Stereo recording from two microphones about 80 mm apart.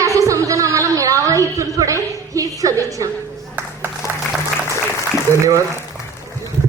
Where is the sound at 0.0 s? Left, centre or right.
Right.